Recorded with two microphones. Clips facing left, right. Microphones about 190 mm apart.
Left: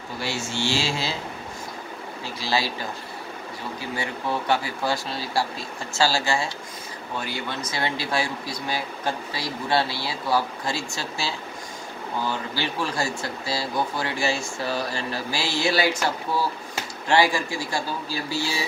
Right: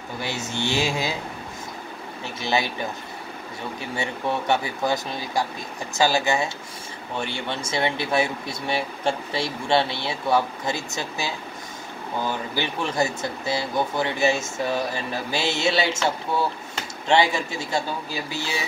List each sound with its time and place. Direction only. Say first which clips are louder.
0.2 s speech: even; 20° right (ahead or behind)
2.4 s speech: right 1 dB; 20° right (ahead or behind)
3.9 s speech: right 2 dB; 25° right (ahead or behind)
17.1 s speech: even; 20° right (ahead or behind)